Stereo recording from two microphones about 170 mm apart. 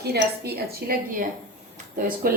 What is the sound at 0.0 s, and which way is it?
A woman's voice, 70° right (ahead or behind).